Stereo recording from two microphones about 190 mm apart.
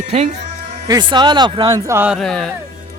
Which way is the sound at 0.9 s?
20° right (ahead or behind).